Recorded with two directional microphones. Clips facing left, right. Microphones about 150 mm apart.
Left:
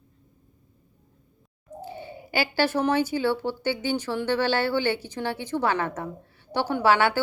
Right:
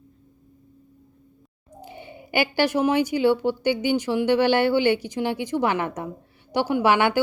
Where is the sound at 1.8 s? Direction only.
15° right (ahead or behind).